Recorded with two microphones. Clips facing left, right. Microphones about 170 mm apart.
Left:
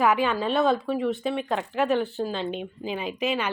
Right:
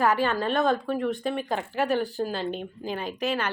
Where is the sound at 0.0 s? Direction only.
5° left (ahead or behind).